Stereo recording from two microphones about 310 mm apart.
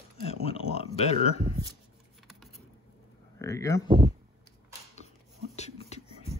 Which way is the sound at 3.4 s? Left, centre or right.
Centre.